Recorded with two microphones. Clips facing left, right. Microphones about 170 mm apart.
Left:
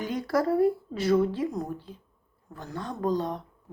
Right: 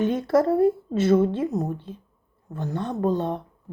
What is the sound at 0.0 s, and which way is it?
Speech, 25° right (ahead or behind).